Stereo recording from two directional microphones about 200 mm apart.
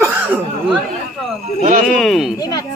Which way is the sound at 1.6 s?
40° right (ahead or behind).